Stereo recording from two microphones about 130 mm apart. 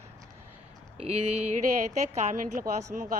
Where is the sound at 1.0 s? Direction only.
55° right (ahead or behind).